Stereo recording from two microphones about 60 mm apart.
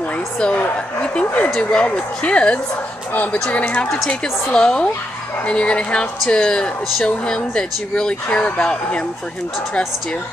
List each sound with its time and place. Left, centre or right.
1.1 s speech: left